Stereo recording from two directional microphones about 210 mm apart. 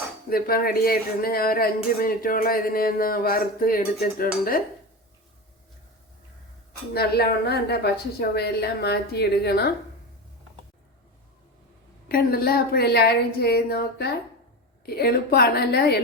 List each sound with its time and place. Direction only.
0.3 s speech: 45° left (ahead or behind)
6.9 s speech: 50° left (ahead or behind)
12.0 s speech: 45° left (ahead or behind)